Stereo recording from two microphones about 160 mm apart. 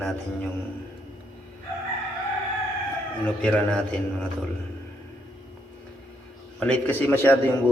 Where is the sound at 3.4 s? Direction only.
5° left (ahead or behind).